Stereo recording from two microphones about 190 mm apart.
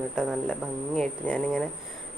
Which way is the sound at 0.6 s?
5° left (ahead or behind).